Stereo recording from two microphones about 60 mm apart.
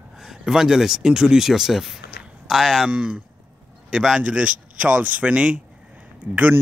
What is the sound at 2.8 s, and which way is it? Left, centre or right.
Speech, centre.